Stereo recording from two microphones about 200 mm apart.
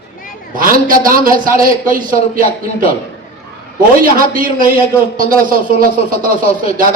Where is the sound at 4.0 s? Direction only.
45° right (ahead or behind).